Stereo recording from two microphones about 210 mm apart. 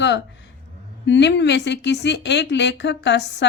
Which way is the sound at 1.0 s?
55° left (ahead or behind).